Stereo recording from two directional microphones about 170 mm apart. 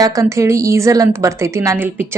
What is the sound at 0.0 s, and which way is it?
A woman's voice, 20° right (ahead or behind).